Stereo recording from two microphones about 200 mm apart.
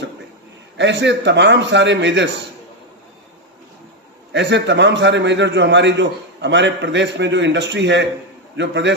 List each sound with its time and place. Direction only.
0.8 s a man's voice: 60° right (ahead or behind)
4.3 s a man's voice: 60° right (ahead or behind)